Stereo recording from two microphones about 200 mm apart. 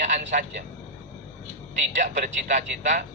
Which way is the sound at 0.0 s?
40° right (ahead or behind).